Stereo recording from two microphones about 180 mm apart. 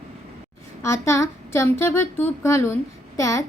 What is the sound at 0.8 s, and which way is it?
A child's voice, 15° left (ahead or behind).